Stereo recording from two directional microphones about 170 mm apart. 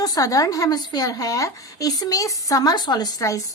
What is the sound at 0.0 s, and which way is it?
A woman's voice, 20° left (ahead or behind).